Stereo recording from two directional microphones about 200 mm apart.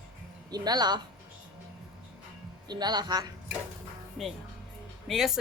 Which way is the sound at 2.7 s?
20° right (ahead or behind).